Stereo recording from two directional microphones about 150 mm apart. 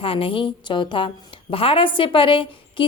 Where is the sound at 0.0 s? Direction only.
35° left (ahead or behind).